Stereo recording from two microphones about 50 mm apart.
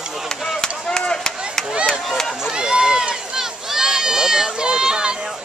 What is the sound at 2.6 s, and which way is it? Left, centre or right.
Run, centre.